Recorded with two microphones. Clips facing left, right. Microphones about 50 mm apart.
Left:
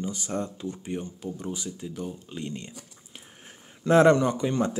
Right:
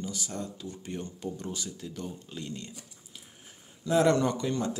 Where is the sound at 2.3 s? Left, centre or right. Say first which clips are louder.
Left 4 dB; left.